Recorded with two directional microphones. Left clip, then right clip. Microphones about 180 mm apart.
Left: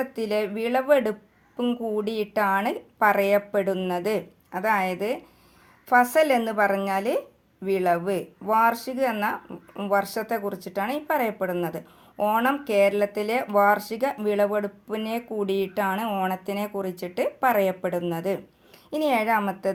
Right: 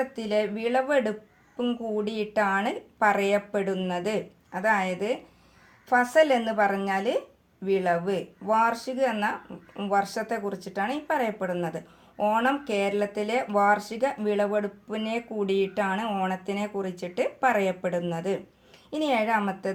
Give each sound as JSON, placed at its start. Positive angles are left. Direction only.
{"t": 0.0, "sound": "a woman's voice", "side_deg": 30}